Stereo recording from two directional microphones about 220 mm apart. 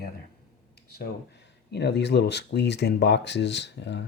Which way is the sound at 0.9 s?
50° left (ahead or behind).